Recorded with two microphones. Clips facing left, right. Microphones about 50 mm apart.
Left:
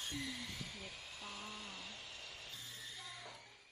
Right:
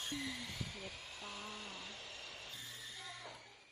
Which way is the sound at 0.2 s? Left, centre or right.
Centre.